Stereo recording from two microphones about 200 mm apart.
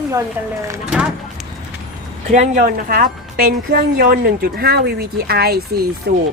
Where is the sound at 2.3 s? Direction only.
40° right (ahead or behind).